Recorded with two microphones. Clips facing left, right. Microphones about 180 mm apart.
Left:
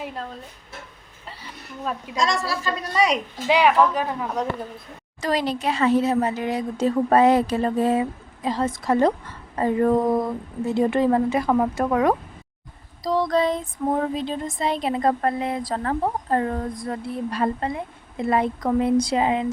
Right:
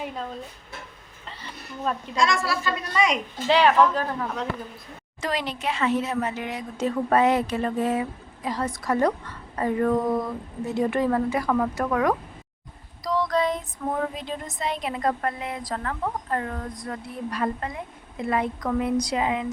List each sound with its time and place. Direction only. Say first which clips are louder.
1.4 s speech: right 1 dB; 5° left (ahead or behind)
2.1 s speech: left 1 dB; 40° left (ahead or behind)
3.4 s speech: left 1 dB; 10° left (ahead or behind)
5.2 s speech: left 5 dB; 35° left (ahead or behind)
10.8 s female singing: left 3 dB; 25° left (ahead or behind)